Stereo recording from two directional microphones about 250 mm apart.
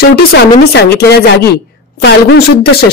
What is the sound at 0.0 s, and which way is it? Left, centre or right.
A woman's voice, left.